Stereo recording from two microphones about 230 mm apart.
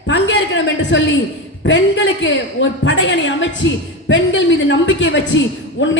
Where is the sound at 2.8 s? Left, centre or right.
Left.